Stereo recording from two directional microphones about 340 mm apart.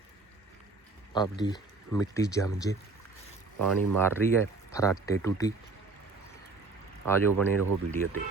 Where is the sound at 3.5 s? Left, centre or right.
Right.